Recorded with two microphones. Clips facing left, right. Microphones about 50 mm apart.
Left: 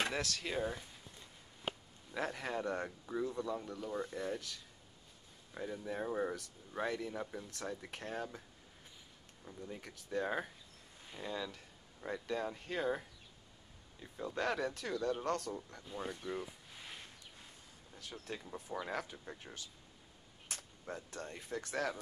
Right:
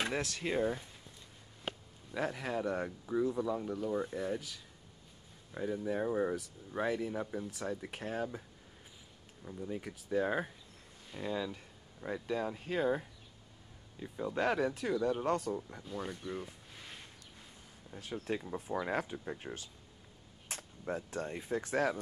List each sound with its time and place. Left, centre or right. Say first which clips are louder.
0.1 s speech: right 3 dB; right
0.6 s speech: right 6 dB; centre
2.1 s speech: right 3 dB; centre
14.0 s speech: right 4 dB; centre
15.9 s a sound: right 1 dB; centre
18.1 s speech: right 8 dB; right
18.9 s speech: right 6 dB; right